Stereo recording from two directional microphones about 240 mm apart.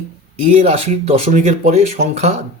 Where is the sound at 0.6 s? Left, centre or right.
Right.